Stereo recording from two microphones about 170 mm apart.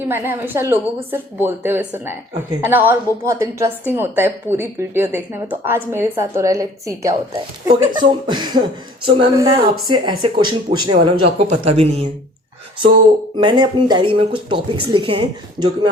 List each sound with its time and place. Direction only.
0.0 s a woman's voice: 15° right (ahead or behind); by 12.0 s 35° right (ahead or behind)
13.3 s speech: 30° right (ahead or behind)